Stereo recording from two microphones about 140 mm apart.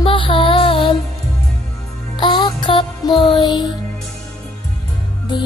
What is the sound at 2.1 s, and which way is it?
Music, 35° left (ahead or behind).